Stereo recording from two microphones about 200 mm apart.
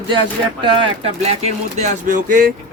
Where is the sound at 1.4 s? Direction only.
40° right (ahead or behind).